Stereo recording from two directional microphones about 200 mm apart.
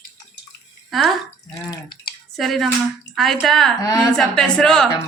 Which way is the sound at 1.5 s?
20° left (ahead or behind).